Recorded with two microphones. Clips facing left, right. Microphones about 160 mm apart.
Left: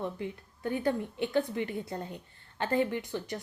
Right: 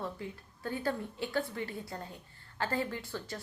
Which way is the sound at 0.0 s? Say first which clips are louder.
Left 4 dB; 20° left (ahead or behind).